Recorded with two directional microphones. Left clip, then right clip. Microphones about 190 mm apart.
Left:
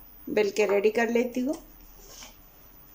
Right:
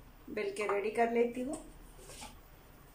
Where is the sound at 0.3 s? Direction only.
55° left (ahead or behind).